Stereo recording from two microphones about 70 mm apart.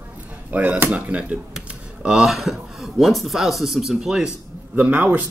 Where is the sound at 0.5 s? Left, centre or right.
Right.